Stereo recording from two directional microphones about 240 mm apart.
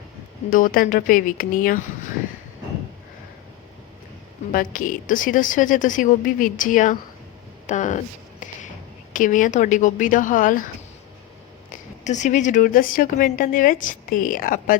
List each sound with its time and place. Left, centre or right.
0.5 s speech: left
4.5 s speech: left
11.7 s speech: left